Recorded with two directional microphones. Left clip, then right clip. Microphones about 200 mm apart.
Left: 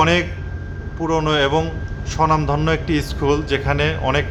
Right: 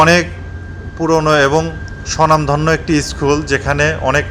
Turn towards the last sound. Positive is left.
turn(degrees=-15)  # may be behind; listen again after turning